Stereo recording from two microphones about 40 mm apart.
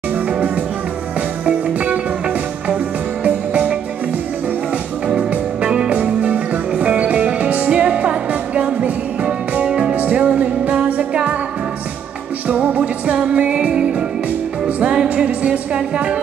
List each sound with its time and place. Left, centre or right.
3.3 s music: right
5.0 s music: right
6.2 s music: right
9.9 s music: right
12.4 s music: right